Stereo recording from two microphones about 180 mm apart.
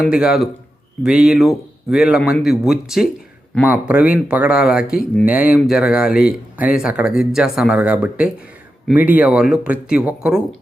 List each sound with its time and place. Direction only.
0.1 s speech: 5° right (ahead or behind)